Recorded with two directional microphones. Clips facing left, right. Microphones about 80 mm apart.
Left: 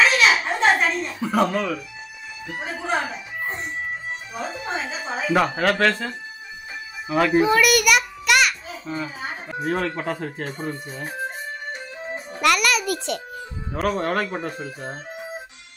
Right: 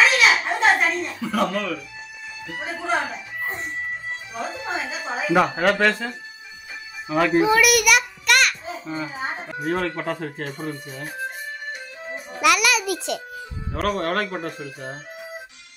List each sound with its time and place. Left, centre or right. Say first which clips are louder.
0.0 s a sound: even; centre
1.2 s speech: left 3 dB; left
2.6 s a child's voice: right 1 dB; centre
9.1 s speech: right 3 dB; right
9.6 s speech: even; centre
10.6 s speech: left 1 dB; left
12.4 s speech: right 1 dB; centre
14.6 s speech: left 1 dB; left